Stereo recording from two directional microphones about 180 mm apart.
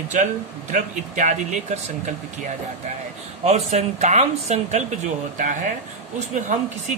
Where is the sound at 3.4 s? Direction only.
35° right (ahead or behind).